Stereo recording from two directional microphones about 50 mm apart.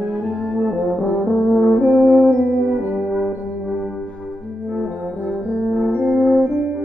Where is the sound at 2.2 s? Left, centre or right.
Right.